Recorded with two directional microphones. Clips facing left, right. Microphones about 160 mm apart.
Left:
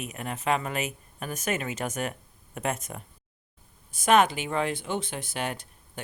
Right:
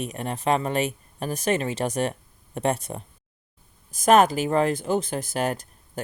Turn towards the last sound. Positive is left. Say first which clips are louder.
# right 7 dB
turn(degrees=-40)  # may be behind; listen again after turning